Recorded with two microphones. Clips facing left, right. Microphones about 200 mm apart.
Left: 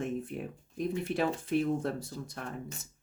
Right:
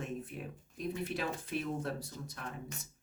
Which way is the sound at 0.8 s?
55° left (ahead or behind).